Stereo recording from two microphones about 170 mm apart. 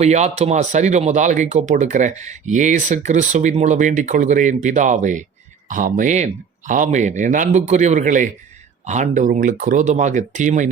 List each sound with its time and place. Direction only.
0.0 s speech: 40° right (ahead or behind)